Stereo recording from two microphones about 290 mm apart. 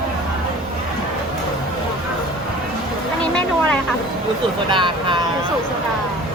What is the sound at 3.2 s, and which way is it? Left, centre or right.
Vehicle, centre.